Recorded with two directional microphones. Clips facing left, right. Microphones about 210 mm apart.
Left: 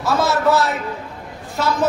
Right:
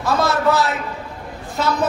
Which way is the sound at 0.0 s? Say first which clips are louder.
Even; centre (ahead or behind).